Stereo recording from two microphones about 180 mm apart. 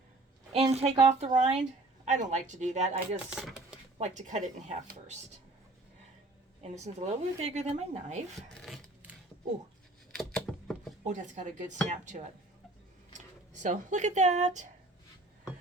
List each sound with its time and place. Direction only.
0.7 s a woman's voice: 35° right (ahead or behind)
3.2 s speech: 5° right (ahead or behind)
3.9 s speech: 40° right (ahead or behind)
6.6 s a woman's voice: 40° right (ahead or behind)
8.6 s filing: 5° right (ahead or behind)
10.2 s a sound: 5° left (ahead or behind)
11.0 s speech: 45° right (ahead or behind)